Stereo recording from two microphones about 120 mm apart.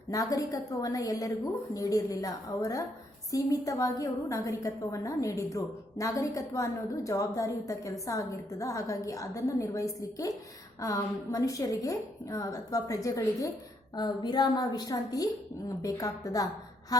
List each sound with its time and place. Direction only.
0.1 s a woman's voice: 30° left (ahead or behind)